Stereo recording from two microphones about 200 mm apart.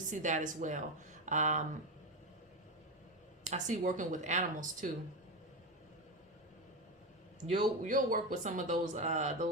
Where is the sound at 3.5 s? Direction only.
40° right (ahead or behind).